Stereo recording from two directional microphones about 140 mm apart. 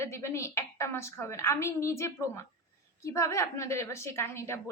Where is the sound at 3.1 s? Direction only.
20° left (ahead or behind).